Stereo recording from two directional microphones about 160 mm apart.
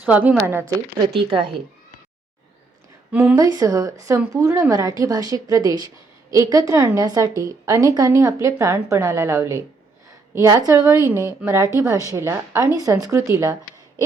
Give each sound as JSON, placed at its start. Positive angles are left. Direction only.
{"t": 0.0, "sound": "a woman's voice", "side_deg": -10}
{"t": 1.3, "sound": "speech", "side_deg": -30}
{"t": 3.1, "sound": "a woman's voice", "side_deg": -10}
{"t": 3.3, "sound": "a woman's voice", "side_deg": -20}